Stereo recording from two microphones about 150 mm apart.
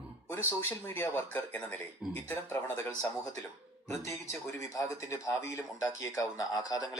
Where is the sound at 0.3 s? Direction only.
15° left (ahead or behind).